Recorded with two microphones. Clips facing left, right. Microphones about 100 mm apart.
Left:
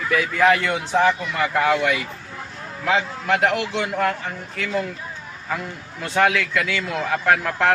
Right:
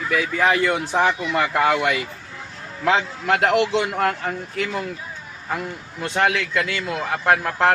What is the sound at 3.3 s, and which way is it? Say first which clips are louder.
Speech: right 2 dB; 35° right (ahead or behind).